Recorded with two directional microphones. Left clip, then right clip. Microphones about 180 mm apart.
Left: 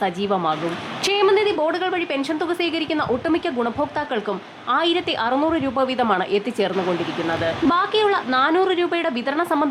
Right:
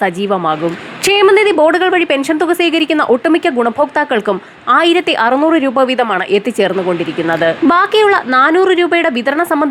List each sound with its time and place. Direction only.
0.0 s a woman's voice: 20° right (ahead or behind)
1.0 s a woman's voice: 30° right (ahead or behind)